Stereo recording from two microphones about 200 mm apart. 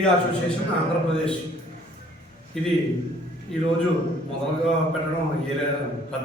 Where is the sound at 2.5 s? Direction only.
Centre (ahead or behind).